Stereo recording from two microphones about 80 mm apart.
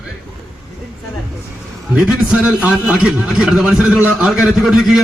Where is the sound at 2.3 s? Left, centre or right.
Centre.